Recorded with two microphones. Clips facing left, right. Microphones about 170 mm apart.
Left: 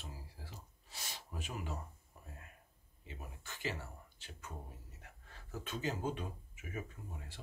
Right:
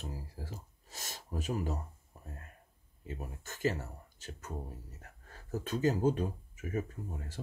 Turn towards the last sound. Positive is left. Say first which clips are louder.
# right 8 dB
turn(degrees=-40)  # may be behind; listen again after turning